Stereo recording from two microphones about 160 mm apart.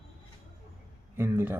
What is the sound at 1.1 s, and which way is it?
Speech, 15° right (ahead or behind).